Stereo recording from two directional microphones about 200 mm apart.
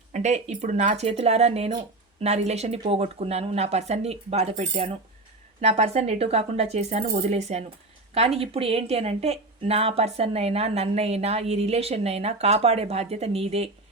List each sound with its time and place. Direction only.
0.1 s speech: 35° right (ahead or behind)